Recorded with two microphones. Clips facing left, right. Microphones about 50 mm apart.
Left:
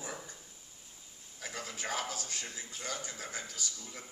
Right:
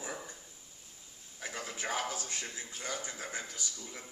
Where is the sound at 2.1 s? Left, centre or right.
Centre.